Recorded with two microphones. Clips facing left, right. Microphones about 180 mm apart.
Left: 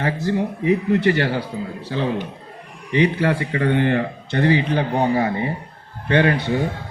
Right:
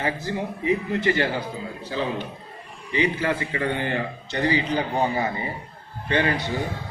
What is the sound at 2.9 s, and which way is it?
A man's voice, 65° left (ahead or behind).